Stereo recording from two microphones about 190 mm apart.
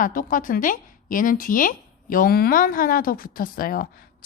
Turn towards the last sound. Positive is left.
turn(degrees=50)  # may be behind; listen again after turning